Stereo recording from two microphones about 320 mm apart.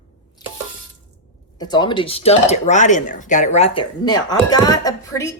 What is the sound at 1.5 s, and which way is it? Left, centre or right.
Speech, centre.